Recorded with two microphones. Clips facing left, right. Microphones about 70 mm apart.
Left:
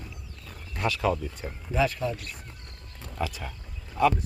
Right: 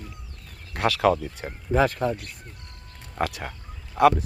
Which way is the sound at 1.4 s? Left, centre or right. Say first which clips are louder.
Right 4 dB; right.